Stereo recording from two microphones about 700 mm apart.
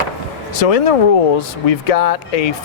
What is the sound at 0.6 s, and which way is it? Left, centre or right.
Speech, left.